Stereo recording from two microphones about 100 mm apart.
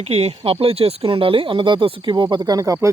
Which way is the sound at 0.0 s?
90° right.